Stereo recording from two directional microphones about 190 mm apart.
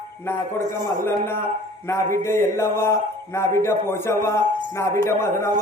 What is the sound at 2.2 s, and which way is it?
A man's voice, 15° left (ahead or behind).